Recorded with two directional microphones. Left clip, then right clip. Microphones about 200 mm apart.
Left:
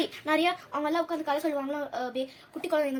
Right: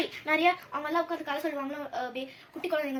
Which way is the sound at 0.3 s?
55° left (ahead or behind).